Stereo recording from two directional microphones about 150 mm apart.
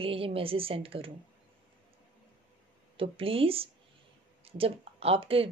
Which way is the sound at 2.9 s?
40° right (ahead or behind).